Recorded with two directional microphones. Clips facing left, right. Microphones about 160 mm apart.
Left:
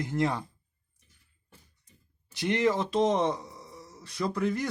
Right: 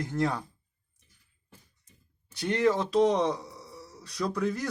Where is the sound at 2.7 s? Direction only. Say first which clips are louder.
Right 3 dB; 15° left (ahead or behind).